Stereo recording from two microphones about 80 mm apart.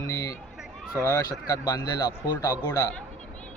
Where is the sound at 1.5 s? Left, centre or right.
Left.